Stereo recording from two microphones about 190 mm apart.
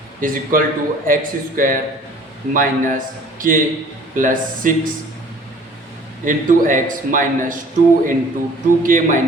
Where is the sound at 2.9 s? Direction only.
45° right (ahead or behind).